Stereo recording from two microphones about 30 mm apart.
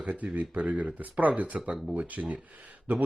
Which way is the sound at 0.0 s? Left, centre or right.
Right.